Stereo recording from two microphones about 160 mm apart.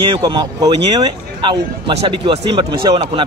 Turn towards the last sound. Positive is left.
turn(degrees=-30)  # may be behind; listen again after turning